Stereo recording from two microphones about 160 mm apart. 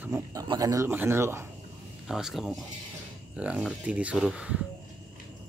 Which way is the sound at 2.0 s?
5° right (ahead or behind).